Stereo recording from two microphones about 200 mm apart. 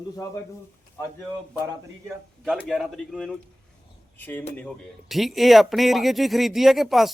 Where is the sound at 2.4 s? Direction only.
Centre (ahead or behind).